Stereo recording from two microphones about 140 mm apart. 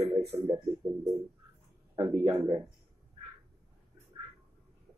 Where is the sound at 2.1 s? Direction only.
55° right (ahead or behind).